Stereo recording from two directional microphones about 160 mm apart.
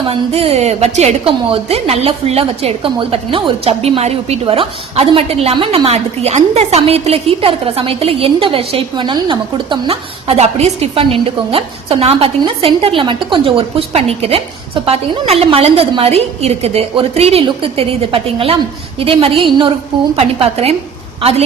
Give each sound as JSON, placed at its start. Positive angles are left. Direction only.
{"t": 0.0, "sound": "a woman's voice", "side_deg": -35}